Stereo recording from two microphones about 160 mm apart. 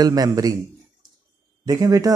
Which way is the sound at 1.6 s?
20° right (ahead or behind).